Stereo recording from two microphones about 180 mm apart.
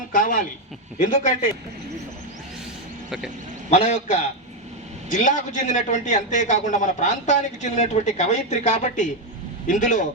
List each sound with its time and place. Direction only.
0.1 s a man's voice: 50° left (ahead or behind)
3.7 s a man's voice: 40° left (ahead or behind)